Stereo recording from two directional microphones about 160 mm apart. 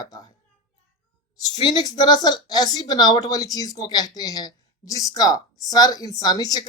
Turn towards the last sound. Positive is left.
turn(degrees=25)  # may be behind; listen again after turning